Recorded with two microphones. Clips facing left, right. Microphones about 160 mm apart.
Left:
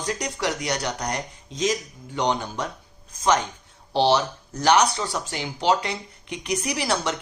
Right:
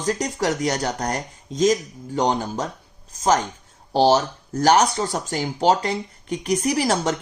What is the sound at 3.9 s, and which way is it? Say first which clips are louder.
Speech: right 3 dB; 45° right (ahead or behind).